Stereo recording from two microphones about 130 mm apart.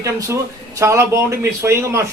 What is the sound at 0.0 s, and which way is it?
Speech, 25° right (ahead or behind).